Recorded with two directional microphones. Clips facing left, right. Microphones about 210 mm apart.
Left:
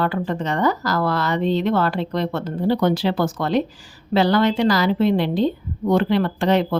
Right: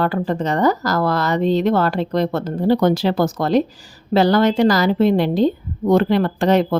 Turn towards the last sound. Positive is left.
turn(degrees=-45)  # may be behind; listen again after turning